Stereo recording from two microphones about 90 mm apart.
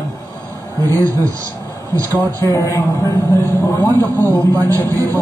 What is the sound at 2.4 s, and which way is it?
Speech, 35° left (ahead or behind).